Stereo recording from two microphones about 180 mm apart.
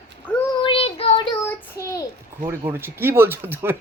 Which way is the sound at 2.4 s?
15° right (ahead or behind).